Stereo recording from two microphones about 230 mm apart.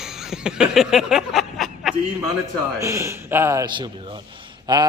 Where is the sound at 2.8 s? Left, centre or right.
Centre.